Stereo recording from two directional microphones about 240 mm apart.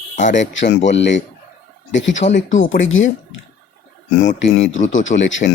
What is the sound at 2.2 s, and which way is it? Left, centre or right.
Speech, left.